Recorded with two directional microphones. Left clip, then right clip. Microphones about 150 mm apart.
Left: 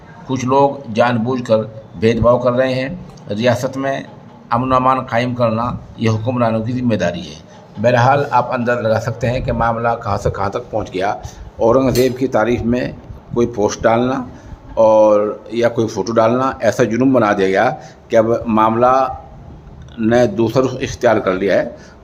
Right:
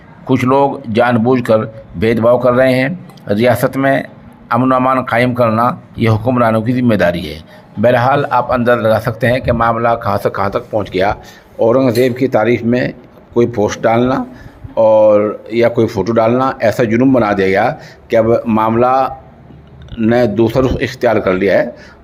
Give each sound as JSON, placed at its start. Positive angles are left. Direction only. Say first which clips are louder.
{"t": 0.3, "sound": "a man's voice", "louder": "right 2 dB", "side_deg": -40}